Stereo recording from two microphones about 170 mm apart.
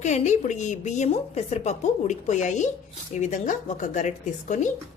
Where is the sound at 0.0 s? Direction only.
45° left (ahead or behind).